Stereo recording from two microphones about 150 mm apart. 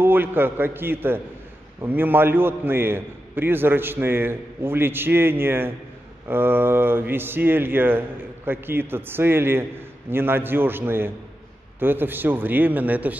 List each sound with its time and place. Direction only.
0.0 s speech: 15° right (ahead or behind)